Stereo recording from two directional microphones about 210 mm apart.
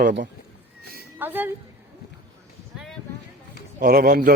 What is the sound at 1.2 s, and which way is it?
Speech, 10° right (ahead or behind).